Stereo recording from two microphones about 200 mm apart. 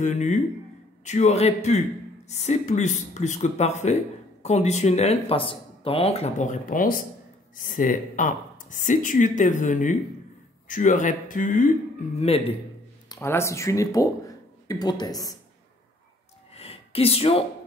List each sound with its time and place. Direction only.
0.0 s speech: 35° left (ahead or behind)
12.2 s a man's voice: 30° left (ahead or behind)
13.1 s speech: 15° left (ahead or behind)
16.5 s gasp: 30° left (ahead or behind)